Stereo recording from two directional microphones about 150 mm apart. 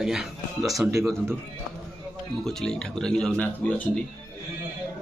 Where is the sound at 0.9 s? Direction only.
20° right (ahead or behind).